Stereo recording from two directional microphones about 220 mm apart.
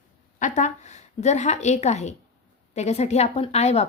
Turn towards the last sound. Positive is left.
turn(degrees=30)  # may be behind; listen again after turning